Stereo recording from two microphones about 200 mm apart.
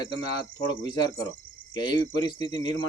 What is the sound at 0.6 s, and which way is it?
Speech, 20° left (ahead or behind).